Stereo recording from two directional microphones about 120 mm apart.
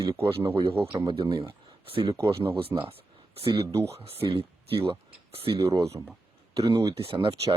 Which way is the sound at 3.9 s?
50° right (ahead or behind).